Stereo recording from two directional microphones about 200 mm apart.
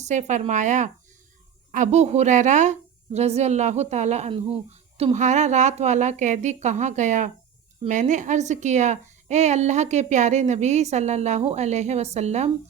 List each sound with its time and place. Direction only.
0.0 s a woman's voice: 35° right (ahead or behind)